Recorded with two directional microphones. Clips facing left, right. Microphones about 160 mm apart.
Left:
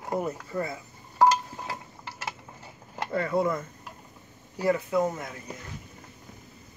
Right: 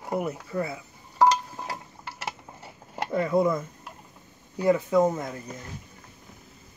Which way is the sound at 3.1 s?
15° right (ahead or behind).